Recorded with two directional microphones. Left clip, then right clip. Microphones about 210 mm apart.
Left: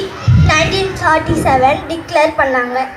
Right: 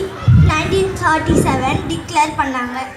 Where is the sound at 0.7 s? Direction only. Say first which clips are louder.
Left 2 dB; 65° right (ahead or behind).